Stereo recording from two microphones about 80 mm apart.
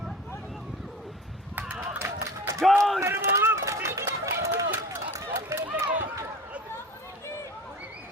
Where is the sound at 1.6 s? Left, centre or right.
Right.